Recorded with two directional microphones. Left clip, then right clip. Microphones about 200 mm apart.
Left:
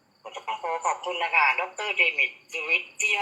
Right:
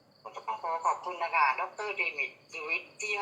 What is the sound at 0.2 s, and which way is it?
Speech, 15° left (ahead or behind).